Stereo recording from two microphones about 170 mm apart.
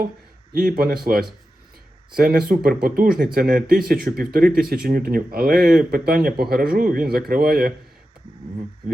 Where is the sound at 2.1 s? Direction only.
60° right (ahead or behind).